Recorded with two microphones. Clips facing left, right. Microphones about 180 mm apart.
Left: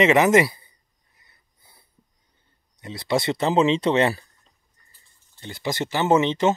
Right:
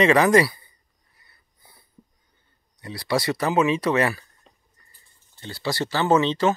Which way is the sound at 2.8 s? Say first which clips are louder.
Left 1 dB; 20° left (ahead or behind).